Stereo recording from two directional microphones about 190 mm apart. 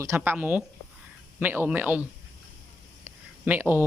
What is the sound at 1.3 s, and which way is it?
Speech, 10° right (ahead or behind).